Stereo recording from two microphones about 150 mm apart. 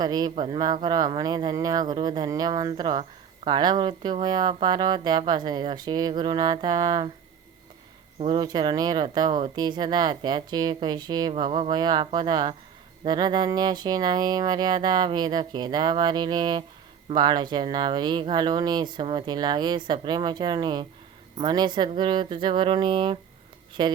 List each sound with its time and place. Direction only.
0.0 s speech: 25° right (ahead or behind)
8.2 s speech: 30° right (ahead or behind)